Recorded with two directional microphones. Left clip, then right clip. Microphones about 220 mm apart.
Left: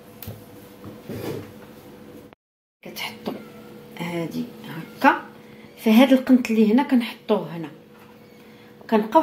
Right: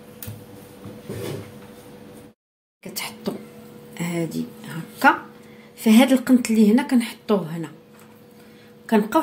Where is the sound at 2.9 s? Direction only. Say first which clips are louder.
Right 1 dB; 55° right (ahead or behind).